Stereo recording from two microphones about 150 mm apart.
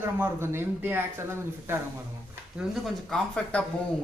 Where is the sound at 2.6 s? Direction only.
5° right (ahead or behind).